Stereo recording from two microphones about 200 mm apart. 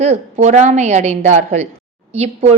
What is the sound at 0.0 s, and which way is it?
A woman's voice, 35° right (ahead or behind).